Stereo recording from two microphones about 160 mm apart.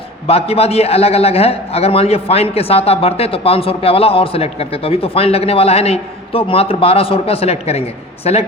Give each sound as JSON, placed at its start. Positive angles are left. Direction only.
{"t": 0.3, "sound": "a man's voice", "side_deg": 40}